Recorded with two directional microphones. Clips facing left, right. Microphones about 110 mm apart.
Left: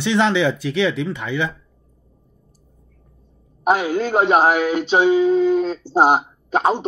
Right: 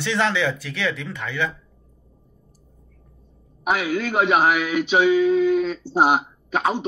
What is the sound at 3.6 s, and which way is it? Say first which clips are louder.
Speech: left 4 dB; 45° left (ahead or behind).